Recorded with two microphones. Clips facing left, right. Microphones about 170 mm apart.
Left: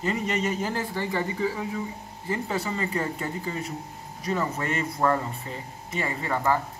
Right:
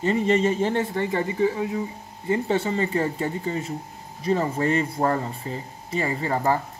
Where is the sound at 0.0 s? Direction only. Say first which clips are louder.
Right 6 dB; 30° right (ahead or behind).